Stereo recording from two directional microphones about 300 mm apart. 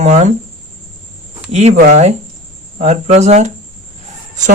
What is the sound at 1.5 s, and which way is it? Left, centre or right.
Speech, right.